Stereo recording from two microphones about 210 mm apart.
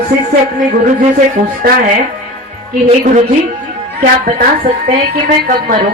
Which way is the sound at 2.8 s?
35° right (ahead or behind).